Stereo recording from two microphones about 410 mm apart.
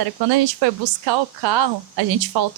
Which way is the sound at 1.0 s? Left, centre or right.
Right.